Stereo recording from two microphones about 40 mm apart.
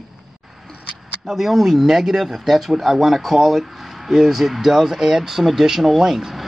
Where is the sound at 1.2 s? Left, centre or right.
Centre.